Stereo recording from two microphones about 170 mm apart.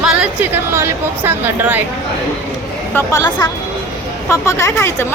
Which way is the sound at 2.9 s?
20° left (ahead or behind).